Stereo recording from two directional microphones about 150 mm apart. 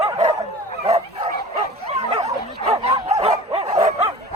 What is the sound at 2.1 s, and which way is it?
Bow-wow, 45° right (ahead or behind).